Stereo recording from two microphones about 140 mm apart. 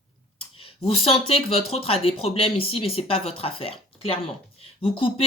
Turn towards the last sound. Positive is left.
turn(degrees=40)  # may be behind; listen again after turning